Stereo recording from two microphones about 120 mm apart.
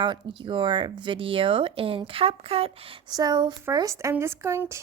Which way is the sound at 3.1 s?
35° right (ahead or behind).